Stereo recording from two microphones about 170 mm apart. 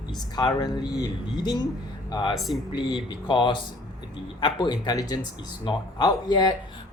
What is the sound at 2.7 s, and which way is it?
Speech, 25° left (ahead or behind).